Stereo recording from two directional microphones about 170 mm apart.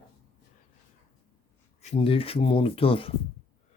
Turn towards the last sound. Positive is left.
turn(degrees=35)  # may be behind; listen again after turning